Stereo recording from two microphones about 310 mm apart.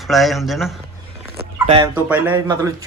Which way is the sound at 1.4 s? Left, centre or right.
Centre.